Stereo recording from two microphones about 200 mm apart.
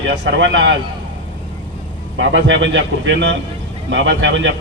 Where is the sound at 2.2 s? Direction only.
65° right (ahead or behind).